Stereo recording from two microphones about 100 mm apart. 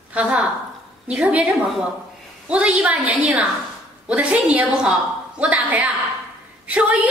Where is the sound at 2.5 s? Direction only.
10° right (ahead or behind).